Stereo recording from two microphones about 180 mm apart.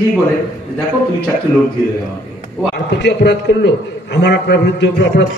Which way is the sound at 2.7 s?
65° left (ahead or behind).